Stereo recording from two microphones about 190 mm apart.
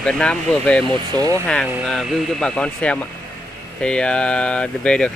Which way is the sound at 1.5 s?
5° left (ahead or behind).